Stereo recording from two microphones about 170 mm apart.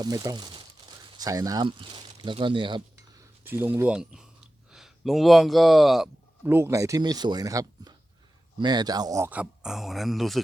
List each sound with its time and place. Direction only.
0.0 s crumpling: 25° right (ahead or behind)
3.4 s speech: 10° right (ahead or behind)
6.4 s speech: 15° right (ahead or behind)